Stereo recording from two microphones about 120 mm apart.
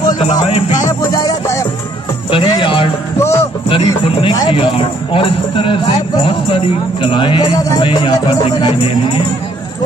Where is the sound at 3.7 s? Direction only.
50° left (ahead or behind).